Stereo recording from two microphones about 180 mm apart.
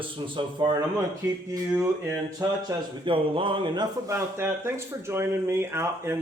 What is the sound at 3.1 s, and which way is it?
Speech, 30° right (ahead or behind).